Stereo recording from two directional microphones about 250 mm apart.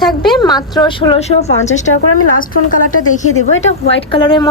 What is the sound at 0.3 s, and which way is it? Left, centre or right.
A woman's voice, centre.